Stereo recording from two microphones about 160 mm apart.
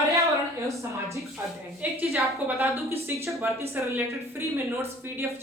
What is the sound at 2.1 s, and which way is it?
Speech, 15° right (ahead or behind).